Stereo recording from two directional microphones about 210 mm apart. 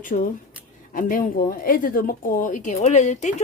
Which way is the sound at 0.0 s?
40° left (ahead or behind).